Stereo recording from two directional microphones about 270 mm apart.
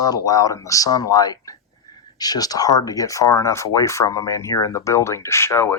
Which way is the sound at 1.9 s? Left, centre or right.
Centre.